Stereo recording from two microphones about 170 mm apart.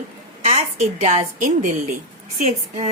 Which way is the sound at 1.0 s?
45° right (ahead or behind).